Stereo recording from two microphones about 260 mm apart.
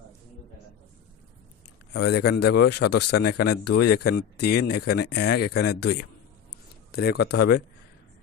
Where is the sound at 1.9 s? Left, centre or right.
Left.